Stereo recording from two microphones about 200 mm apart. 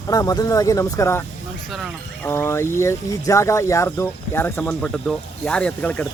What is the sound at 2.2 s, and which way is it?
Speech, 10° left (ahead or behind).